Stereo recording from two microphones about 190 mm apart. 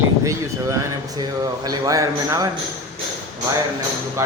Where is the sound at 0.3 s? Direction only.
20° right (ahead or behind).